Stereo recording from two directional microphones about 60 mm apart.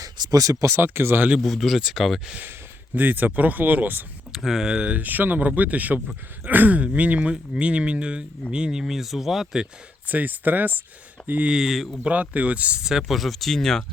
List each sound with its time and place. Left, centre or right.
0.0 s speech: right
0.8 s speech: right
1.4 s speech: centre
2.4 s speech: right
4.4 s speech: centre
4.7 s speech: centre
10.1 s speech: right
11.5 s speech: centre
12.0 s speech: right
12.9 s speech: centre